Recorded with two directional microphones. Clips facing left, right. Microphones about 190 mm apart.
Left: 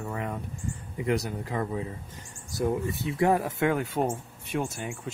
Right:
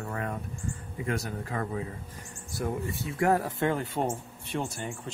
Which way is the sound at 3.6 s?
10° left (ahead or behind).